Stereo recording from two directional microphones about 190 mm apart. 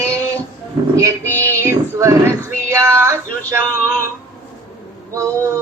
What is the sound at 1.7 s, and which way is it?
Speech, 15° right (ahead or behind).